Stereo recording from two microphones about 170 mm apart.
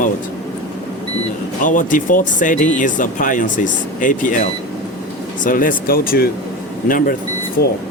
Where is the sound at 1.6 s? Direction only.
50° left (ahead or behind).